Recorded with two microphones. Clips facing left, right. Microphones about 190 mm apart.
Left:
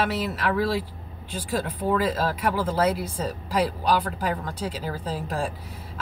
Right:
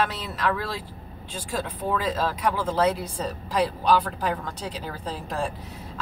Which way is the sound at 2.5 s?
5° left (ahead or behind).